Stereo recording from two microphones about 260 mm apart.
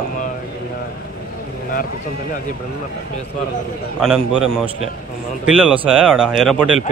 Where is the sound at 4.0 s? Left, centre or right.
Centre.